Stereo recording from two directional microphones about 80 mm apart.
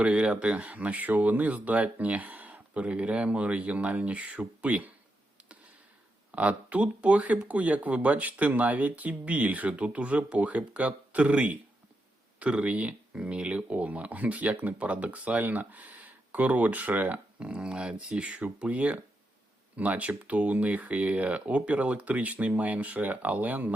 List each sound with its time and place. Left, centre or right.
0.0 s speech: centre
6.3 s speech: centre